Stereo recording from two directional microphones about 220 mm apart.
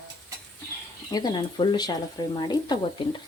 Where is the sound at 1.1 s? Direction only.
20° left (ahead or behind).